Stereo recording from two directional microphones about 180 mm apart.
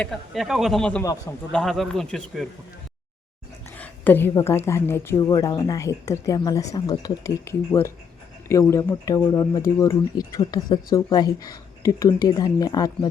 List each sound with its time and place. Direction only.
0.0 s speech: centre (ahead or behind)
3.8 s a woman's voice: 10° left (ahead or behind)